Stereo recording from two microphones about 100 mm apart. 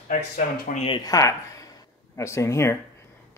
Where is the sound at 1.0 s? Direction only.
35° left (ahead or behind).